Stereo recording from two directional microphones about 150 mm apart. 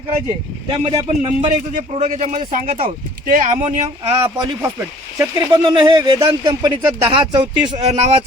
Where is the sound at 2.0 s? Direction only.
55° right (ahead or behind).